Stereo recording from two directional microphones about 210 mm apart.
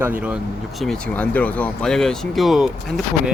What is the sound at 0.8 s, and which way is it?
Speech, 5° left (ahead or behind).